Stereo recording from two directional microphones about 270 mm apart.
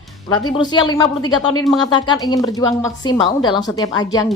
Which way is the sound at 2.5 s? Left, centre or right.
Centre.